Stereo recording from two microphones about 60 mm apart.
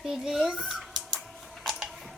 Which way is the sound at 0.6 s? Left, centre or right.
Centre.